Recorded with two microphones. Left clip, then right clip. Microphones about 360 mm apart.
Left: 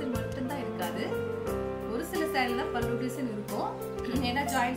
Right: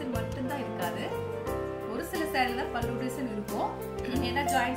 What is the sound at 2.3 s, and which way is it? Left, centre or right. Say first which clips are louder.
Speech: right 2 dB; centre.